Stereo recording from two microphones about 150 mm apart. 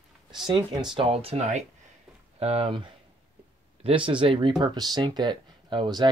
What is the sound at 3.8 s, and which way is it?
Speech, 35° right (ahead or behind).